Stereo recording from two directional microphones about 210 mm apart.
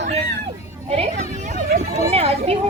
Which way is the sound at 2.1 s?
30° right (ahead or behind).